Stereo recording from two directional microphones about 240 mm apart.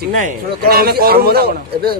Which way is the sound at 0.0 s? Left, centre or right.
Right.